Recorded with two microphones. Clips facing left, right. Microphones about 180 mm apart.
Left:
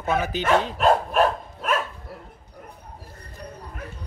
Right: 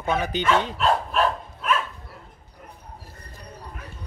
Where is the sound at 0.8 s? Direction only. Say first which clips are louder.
Left 3 dB; 45° left (ahead or behind).